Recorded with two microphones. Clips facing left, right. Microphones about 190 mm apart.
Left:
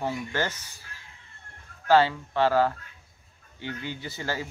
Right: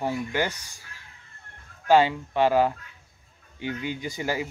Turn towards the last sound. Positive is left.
turn(degrees=-15)  # may be behind; listen again after turning